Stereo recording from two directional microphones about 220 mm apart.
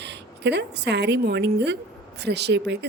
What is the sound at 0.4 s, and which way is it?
A woman's voice, 50° right (ahead or behind).